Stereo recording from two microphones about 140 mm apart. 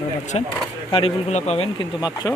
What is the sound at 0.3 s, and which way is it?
Speech, 45° left (ahead or behind).